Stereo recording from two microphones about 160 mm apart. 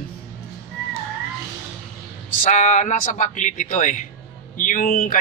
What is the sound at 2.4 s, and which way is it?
A man's voice, 50° left (ahead or behind).